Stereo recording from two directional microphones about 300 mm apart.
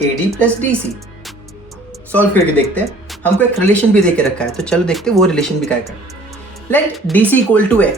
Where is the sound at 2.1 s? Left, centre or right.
Centre.